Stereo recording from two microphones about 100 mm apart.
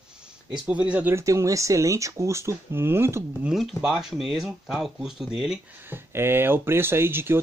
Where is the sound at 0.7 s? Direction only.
10° right (ahead or behind).